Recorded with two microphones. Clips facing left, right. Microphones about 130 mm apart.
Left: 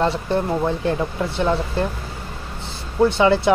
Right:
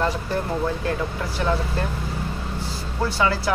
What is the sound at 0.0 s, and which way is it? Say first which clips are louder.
Speech: left 4 dB; 30° left (ahead or behind).